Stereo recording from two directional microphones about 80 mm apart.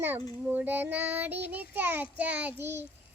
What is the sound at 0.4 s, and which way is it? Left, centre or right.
Child singing, right.